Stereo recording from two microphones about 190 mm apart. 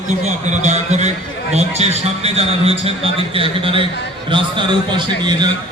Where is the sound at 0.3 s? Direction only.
35° right (ahead or behind).